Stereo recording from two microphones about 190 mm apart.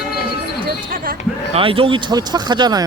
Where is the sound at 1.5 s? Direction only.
30° right (ahead or behind).